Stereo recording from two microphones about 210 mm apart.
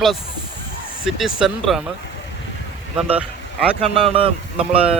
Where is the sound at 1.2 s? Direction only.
Centre (ahead or behind).